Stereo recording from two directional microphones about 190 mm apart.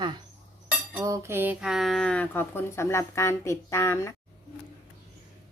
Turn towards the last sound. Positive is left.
turn(degrees=15)  # may be behind; listen again after turning